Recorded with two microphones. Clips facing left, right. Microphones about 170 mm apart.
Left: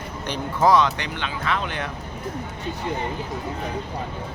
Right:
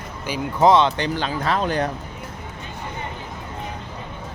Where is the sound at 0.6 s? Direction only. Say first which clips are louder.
Right 3 dB; 25° right (ahead or behind).